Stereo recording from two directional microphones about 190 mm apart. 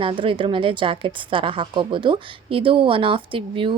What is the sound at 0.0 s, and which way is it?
A woman's voice, 25° right (ahead or behind).